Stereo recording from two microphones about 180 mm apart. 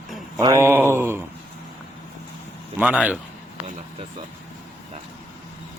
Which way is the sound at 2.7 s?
5° right (ahead or behind).